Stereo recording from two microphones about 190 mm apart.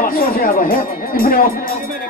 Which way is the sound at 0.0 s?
50° left (ahead or behind).